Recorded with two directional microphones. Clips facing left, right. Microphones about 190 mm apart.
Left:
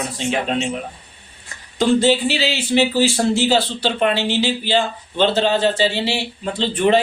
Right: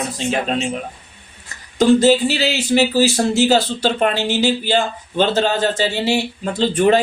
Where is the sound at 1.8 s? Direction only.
40° right (ahead or behind).